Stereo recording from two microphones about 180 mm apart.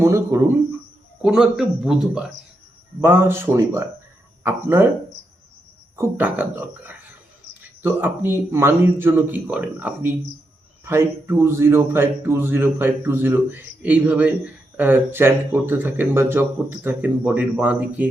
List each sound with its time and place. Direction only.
0.0 s a man's voice: 15° right (ahead or behind)
1.2 s a man's voice: 5° right (ahead or behind)
6.0 s a man's voice: 10° right (ahead or behind)